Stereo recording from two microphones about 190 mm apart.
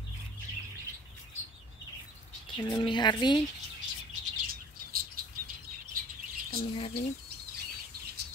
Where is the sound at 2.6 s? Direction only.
25° left (ahead or behind).